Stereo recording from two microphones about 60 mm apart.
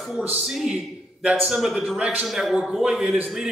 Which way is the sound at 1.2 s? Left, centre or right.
Centre.